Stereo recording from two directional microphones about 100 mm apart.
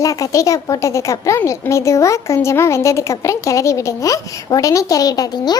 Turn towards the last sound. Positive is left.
turn(degrees=40)  # may be behind; listen again after turning